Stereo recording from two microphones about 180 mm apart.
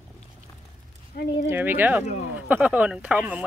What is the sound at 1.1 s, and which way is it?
Speech, 65° left (ahead or behind).